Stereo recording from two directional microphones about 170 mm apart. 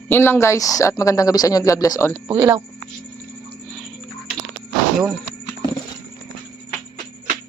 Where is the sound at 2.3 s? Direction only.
20° right (ahead or behind).